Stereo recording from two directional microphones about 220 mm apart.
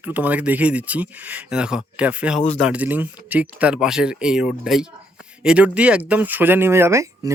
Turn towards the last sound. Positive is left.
turn(degrees=-15)  # may be behind; listen again after turning